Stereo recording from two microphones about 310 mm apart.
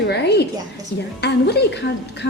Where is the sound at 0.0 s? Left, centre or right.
Left.